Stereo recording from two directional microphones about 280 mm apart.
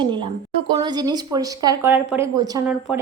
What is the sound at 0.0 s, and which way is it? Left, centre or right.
A woman's voice, centre.